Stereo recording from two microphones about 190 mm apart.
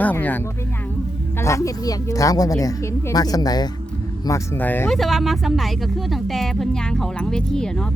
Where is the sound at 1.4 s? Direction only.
15° left (ahead or behind).